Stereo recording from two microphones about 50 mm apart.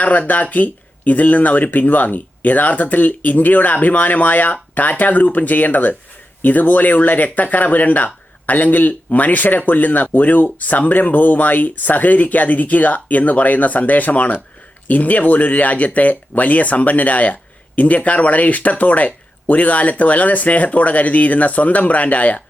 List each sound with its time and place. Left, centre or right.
0.0 s speech: left